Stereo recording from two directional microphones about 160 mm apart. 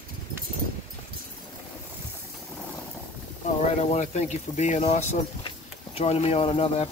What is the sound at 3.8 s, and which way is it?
Speech, 45° left (ahead or behind).